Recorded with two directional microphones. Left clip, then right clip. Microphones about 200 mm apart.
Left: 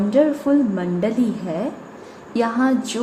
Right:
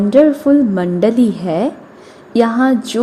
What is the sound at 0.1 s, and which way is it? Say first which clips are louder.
A woman's voice: right 7 dB; 30° right (ahead or behind).